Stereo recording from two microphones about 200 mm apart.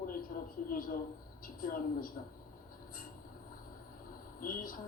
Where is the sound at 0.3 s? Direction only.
45° left (ahead or behind).